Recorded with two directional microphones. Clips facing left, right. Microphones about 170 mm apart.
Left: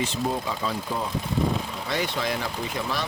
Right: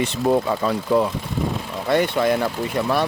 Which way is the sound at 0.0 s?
65° right (ahead or behind).